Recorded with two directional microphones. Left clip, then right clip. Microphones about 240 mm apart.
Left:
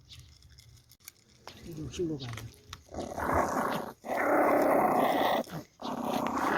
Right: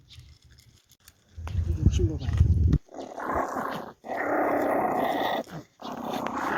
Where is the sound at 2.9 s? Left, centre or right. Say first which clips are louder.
Left 1 dB; left.